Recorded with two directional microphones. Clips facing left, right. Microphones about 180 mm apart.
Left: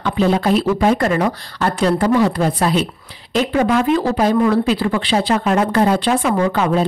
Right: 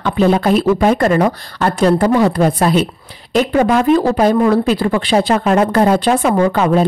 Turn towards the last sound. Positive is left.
turn(degrees=-45)  # may be behind; listen again after turning